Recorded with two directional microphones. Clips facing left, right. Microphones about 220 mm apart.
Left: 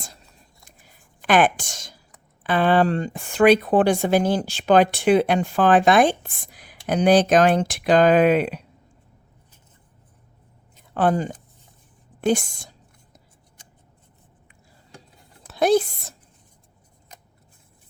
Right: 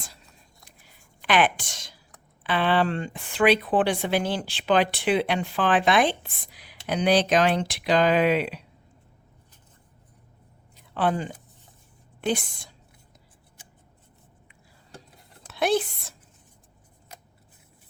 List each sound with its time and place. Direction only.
0.9 s a sound: 45° left (ahead or behind)
2.4 s speech: 45° left (ahead or behind)
10.9 s speech: 45° left (ahead or behind)
15.5 s a woman's voice: 40° left (ahead or behind)